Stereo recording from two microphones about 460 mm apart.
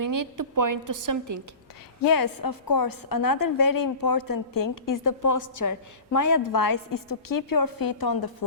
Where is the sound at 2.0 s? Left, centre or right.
Left.